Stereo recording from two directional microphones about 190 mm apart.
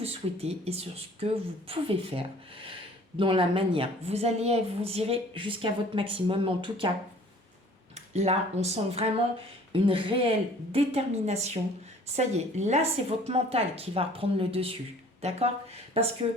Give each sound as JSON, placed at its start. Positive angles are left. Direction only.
{"t": 0.0, "sound": "a woman's voice", "side_deg": -30}
{"t": 7.9, "sound": "a woman's voice", "side_deg": -35}